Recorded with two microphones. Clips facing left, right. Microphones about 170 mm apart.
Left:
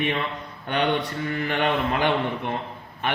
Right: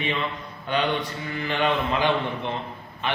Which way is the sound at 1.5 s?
55° left (ahead or behind).